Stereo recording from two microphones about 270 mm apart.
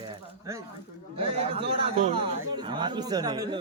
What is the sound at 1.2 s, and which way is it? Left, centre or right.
A man's voice, right.